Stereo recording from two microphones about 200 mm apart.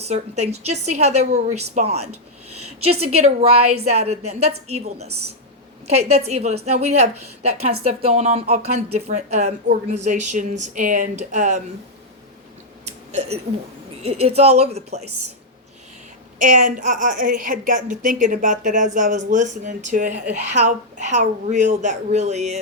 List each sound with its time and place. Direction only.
0.0 s a woman's voice: 35° right (ahead or behind)
3.1 s a woman's voice: 30° right (ahead or behind)
6.0 s a woman's voice: 30° right (ahead or behind)
12.8 s a sound: 35° right (ahead or behind)
14.0 s a woman's voice: 30° right (ahead or behind)
16.4 s a woman's voice: 45° right (ahead or behind)